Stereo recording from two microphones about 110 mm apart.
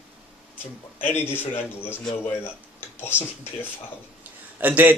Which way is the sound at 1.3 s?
20° left (ahead or behind).